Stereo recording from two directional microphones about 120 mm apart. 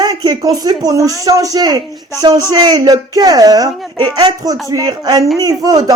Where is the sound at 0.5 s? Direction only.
35° right (ahead or behind).